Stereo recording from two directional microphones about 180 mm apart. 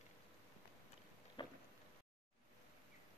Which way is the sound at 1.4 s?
25° left (ahead or behind).